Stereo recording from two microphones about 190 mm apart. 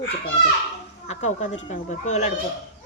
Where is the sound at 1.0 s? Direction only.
35° left (ahead or behind).